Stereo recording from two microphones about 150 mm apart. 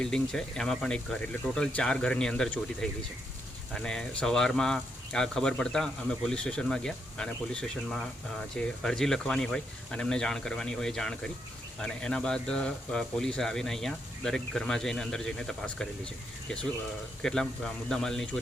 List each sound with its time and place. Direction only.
0.0 s speech: 5° left (ahead or behind)
17.2 s speech: 5° left (ahead or behind)